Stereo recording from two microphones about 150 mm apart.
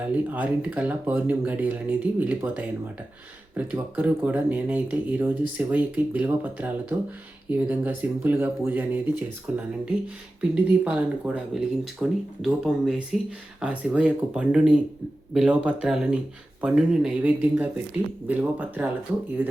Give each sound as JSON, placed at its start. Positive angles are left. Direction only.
{"t": 0.0, "sound": "speech", "side_deg": -10}